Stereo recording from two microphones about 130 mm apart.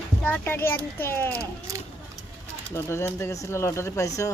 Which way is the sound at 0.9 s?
15° left (ahead or behind).